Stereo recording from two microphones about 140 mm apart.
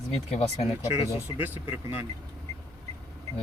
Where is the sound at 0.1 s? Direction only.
45° left (ahead or behind).